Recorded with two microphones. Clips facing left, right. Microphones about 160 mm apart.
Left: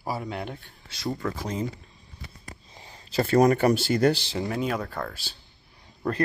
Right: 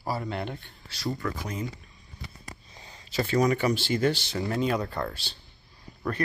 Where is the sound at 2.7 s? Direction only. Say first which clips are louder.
Left 3 dB; 30° left (ahead or behind).